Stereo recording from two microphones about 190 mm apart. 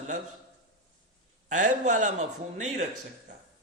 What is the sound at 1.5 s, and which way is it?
Speech, 40° right (ahead or behind).